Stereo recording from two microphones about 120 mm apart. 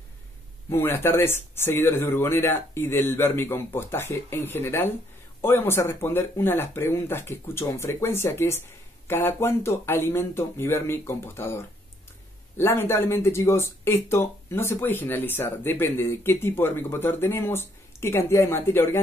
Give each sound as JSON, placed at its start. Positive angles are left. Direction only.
{"t": 0.7, "sound": "speech", "side_deg": 20}